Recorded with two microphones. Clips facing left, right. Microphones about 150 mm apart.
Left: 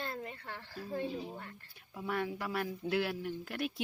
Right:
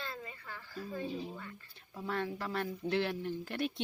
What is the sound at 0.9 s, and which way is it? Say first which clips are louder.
Speech: left 2 dB; 55° left (ahead or behind).